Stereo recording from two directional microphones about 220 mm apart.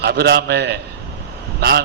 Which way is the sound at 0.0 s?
50° right (ahead or behind).